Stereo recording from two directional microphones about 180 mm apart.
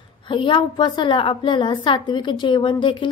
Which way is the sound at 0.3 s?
30° left (ahead or behind).